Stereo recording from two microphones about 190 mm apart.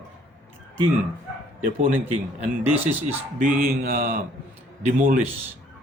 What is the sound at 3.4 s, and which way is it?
A man's voice, 45° right (ahead or behind).